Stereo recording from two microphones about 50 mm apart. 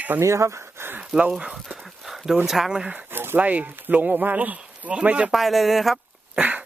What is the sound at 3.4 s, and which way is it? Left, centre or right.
Speech, right.